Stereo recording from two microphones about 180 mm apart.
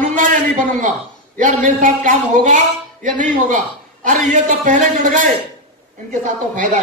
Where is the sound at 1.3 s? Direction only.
45° right (ahead or behind).